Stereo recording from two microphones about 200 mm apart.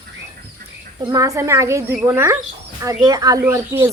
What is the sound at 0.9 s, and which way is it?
A woman's voice, 20° right (ahead or behind).